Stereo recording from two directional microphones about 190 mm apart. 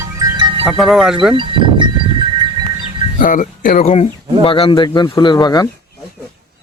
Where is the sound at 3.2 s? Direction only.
45° left (ahead or behind); by 5.7 s 20° left (ahead or behind).